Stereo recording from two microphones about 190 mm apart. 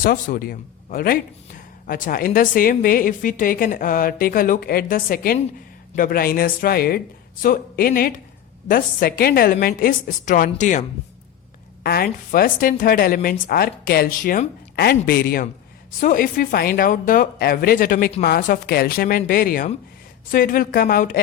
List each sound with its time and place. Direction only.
0.0 s a woman's voice: 50° left (ahead or behind)
11.8 s a woman's voice: 55° left (ahead or behind)